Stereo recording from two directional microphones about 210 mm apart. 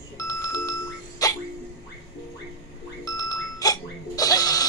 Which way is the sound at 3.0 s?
15° left (ahead or behind).